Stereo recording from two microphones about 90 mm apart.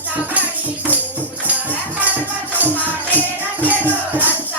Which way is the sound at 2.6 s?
20° right (ahead or behind).